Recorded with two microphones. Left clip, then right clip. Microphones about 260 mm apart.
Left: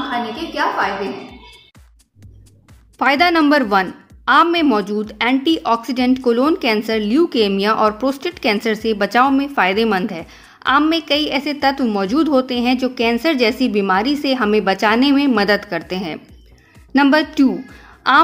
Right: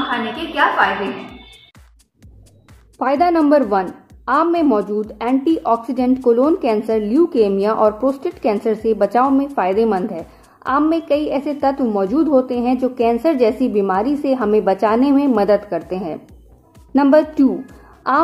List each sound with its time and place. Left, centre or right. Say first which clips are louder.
0.3 s a woman's voice: right 3 dB; centre
3.0 s a woman's voice: left 1 dB; left